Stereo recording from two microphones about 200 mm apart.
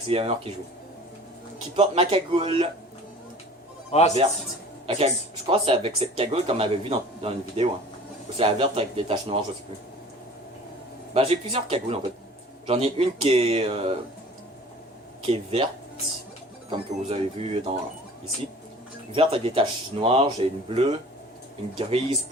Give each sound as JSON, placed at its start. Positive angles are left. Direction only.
{"t": 0.1, "sound": "speech", "side_deg": -30}
{"t": 1.7, "sound": "speech", "side_deg": -30}
{"t": 4.2, "sound": "speech", "side_deg": -20}
{"t": 11.1, "sound": "speech", "side_deg": -30}
{"t": 15.3, "sound": "speech", "side_deg": -30}
{"t": 16.6, "sound": "speech", "side_deg": -25}
{"t": 19.1, "sound": "speech", "side_deg": -30}